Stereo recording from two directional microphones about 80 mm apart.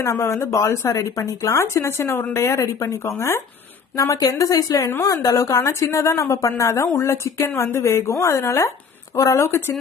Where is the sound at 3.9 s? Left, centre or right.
Left.